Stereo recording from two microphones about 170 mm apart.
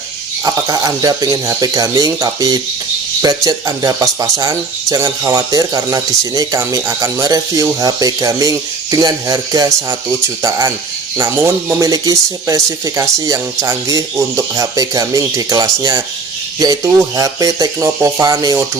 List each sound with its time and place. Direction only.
0.4 s speech: 20° right (ahead or behind)
11.2 s speech: 15° right (ahead or behind)